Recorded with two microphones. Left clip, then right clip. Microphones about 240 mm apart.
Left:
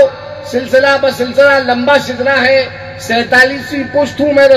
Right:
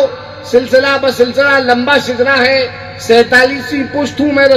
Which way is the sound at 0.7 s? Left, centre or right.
Right.